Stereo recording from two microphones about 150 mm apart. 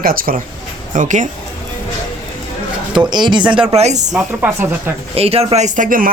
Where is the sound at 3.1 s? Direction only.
30° right (ahead or behind).